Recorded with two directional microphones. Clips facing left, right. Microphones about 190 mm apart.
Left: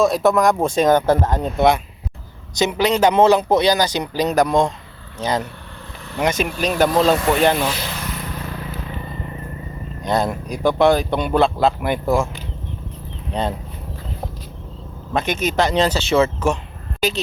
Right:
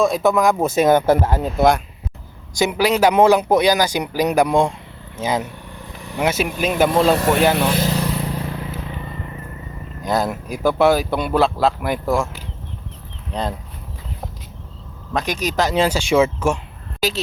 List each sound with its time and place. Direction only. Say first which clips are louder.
0.0 s speech: left 1 dB; centre (ahead or behind)
7.2 s speech: right 1 dB; 45° right (ahead or behind)
7.5 s speech: right 2 dB; 60° right (ahead or behind)
7.8 s vehicle: right 8 dB; 35° right (ahead or behind)
10.0 s speech: even; centre (ahead or behind)
15.1 s speech: left 1 dB; centre (ahead or behind)